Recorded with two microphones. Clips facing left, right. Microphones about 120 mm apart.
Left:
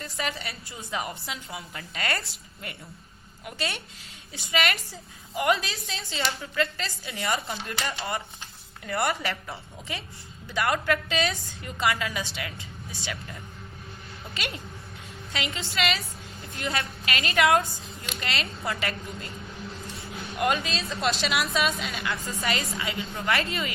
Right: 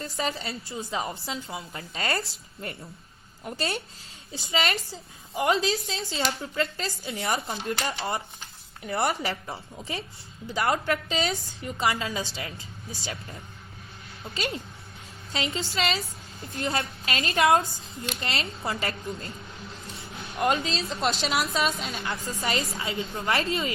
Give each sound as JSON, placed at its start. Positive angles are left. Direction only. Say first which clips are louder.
{"t": 0.0, "sound": "a woman's voice", "louder": "right 2 dB", "side_deg": -30}
{"t": 14.3, "sound": "a woman's voice", "louder": "right 4 dB", "side_deg": -35}
{"t": 20.4, "sound": "a woman's voice", "louder": "right 1 dB", "side_deg": -30}